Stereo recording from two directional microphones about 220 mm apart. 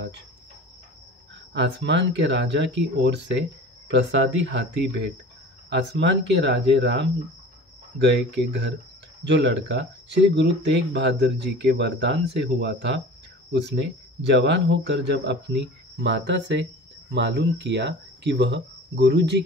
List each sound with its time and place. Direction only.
1.5 s speech: 55° right (ahead or behind)